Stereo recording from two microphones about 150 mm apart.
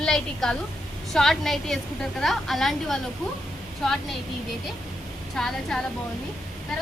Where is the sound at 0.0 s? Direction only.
5° left (ahead or behind).